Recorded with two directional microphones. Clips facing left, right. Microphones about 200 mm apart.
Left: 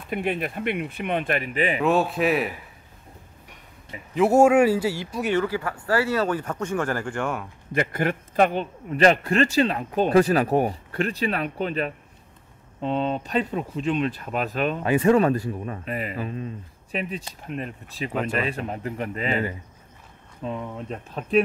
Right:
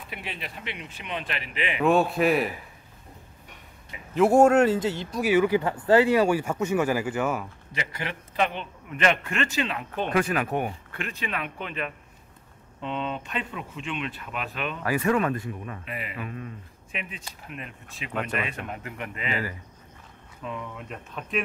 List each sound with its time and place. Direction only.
0.1 s speech: 50° left (ahead or behind)
1.8 s a man's voice: centre (ahead or behind)
4.1 s a man's voice: 5° left (ahead or behind)
5.1 s a man's voice: 5° right (ahead or behind)
5.4 s speech: 20° right (ahead or behind); by 7.4 s 5° right (ahead or behind)
7.7 s speech: 50° left (ahead or behind)
14.8 s speech: 25° left (ahead or behind)
16.3 s speech: 25° left (ahead or behind)
20.4 s speech: 35° left (ahead or behind)